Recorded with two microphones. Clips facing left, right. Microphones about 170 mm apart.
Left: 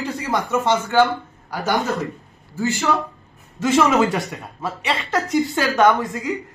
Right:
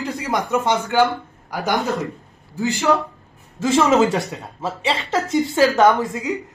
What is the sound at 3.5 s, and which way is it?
Speech, 25° right (ahead or behind).